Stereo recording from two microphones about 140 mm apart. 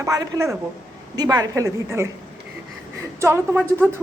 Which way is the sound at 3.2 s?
15° right (ahead or behind).